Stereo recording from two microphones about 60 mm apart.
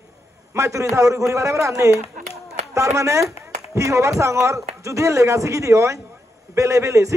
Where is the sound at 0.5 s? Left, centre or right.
Right.